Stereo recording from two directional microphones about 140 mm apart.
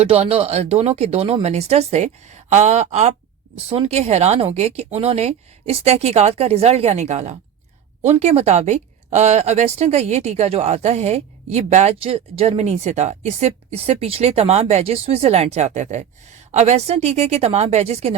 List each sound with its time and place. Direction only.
0.0 s speech: 45° right (ahead or behind)
12.0 s speech: 45° right (ahead or behind)